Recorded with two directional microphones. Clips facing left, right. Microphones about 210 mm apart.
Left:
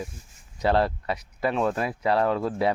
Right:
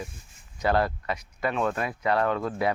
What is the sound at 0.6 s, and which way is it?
Speech, 30° left (ahead or behind).